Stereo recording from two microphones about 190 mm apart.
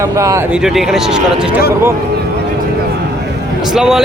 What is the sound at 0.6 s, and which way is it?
Speech, centre (ahead or behind).